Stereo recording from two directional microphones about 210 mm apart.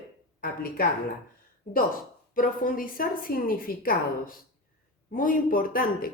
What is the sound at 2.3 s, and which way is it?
A woman's voice, 40° left (ahead or behind).